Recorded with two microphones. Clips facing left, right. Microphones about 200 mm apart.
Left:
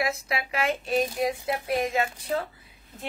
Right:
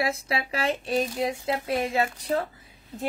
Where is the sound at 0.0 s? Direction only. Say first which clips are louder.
Right 1 dB; 30° right (ahead or behind).